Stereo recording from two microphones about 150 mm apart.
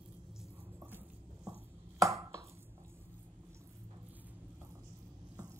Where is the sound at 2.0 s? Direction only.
20° right (ahead or behind).